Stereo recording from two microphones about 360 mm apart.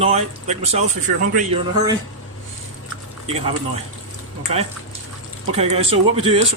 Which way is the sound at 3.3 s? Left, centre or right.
Centre.